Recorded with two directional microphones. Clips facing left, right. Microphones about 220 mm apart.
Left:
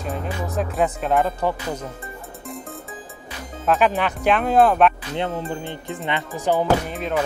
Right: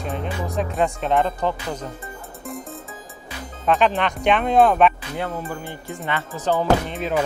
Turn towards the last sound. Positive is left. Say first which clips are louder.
# right 1 dB
turn(degrees=0)  # may be behind; listen again after turning